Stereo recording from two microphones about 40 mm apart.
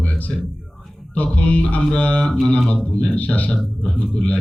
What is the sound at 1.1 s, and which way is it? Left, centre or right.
Speech, left.